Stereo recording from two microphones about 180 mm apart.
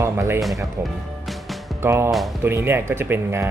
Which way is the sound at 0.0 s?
15° right (ahead or behind).